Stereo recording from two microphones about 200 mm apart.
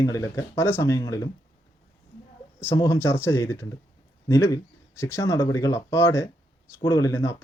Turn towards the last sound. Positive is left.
turn(degrees=15)  # may be behind; listen again after turning